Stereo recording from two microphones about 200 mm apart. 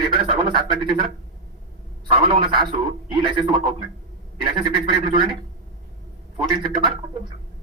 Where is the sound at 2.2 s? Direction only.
20° right (ahead or behind).